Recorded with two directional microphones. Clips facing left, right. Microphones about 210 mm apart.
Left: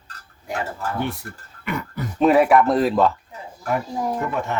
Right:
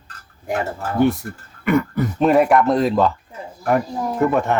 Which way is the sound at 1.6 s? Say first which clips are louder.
Right 10 dB; 50° right (ahead or behind).